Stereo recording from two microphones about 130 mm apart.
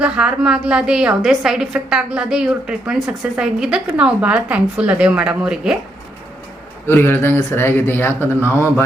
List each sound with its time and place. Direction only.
0.0 s a woman's voice: 10° right (ahead or behind)
6.8 s speech: 15° left (ahead or behind)